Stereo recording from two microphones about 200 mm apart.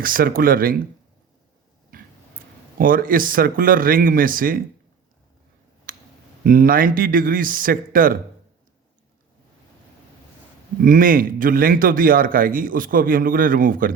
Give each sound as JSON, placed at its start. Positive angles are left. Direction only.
{"t": 0.0, "sound": "a man's voice", "side_deg": -45}
{"t": 1.9, "sound": "a sound", "side_deg": -45}
{"t": 2.7, "sound": "a man's voice", "side_deg": -45}
{"t": 5.9, "sound": "a sound", "side_deg": -45}
{"t": 6.4, "sound": "a man's voice", "side_deg": -45}
{"t": 10.8, "sound": "a man's voice", "side_deg": -45}